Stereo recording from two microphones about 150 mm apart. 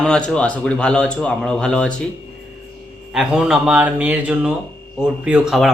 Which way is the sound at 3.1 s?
5° right (ahead or behind).